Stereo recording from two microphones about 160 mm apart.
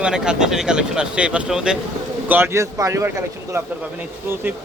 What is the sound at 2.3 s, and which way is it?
Speech, 15° right (ahead or behind).